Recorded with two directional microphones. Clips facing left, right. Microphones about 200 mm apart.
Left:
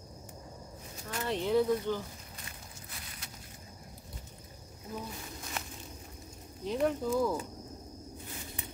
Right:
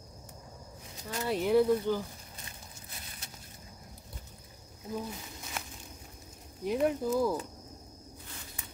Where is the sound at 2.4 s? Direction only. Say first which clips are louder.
Left 1 dB; 25° right (ahead or behind).